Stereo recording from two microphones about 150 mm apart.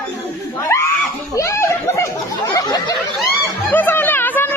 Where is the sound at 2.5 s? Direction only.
30° left (ahead or behind).